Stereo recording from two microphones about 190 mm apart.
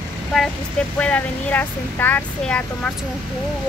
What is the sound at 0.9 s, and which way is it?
Speech, 5° left (ahead or behind).